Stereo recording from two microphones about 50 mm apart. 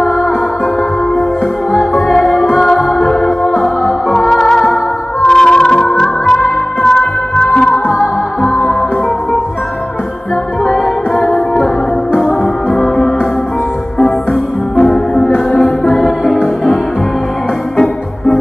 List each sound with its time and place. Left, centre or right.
2.0 s music: centre
10.6 s music: centre
14.8 s music: left
15.9 s music: centre
17.7 s organ: centre